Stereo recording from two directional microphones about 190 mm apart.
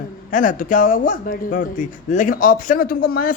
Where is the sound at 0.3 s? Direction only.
45° left (ahead or behind).